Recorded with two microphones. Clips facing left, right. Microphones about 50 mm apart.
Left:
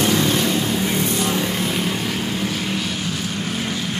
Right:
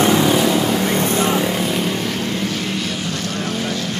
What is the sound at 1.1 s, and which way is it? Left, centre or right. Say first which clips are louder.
Vehicle: right 4 dB; right.